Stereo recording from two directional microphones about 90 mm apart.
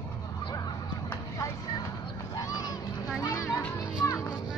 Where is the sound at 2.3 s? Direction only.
45° left (ahead or behind).